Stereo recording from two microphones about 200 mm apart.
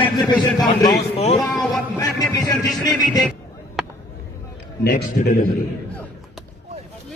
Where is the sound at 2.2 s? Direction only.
20° left (ahead or behind).